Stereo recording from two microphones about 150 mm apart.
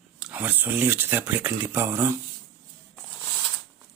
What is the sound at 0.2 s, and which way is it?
Speech, 10° right (ahead or behind).